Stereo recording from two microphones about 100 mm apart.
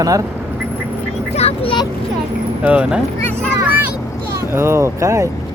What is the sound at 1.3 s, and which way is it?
Vehicle, 80° left.